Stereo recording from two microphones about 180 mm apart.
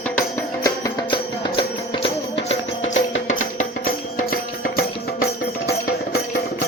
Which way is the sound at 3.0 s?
90° left.